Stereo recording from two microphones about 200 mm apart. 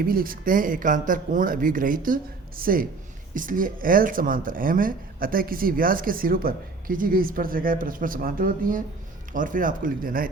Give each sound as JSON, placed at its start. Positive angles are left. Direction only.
{"t": 0.0, "sound": "speech", "side_deg": -45}